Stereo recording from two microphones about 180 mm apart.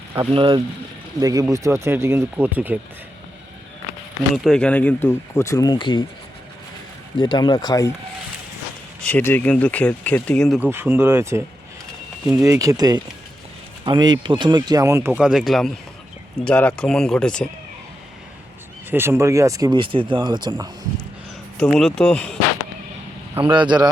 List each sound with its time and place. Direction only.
0.3 s speech: 30° right (ahead or behind)
1.2 s speech: 20° right (ahead or behind)
4.4 s speech: 5° left (ahead or behind); by 6.1 s 25° left (ahead or behind)
7.2 s speech: 25° left (ahead or behind)
9.0 s speech: 10° left (ahead or behind)
10.6 s speech: 10° right (ahead or behind); by 17.5 s 5° left (ahead or behind)
18.9 s speech: 10° right (ahead or behind)
21.6 s speech: centre (ahead or behind)
23.4 s speech: 25° right (ahead or behind)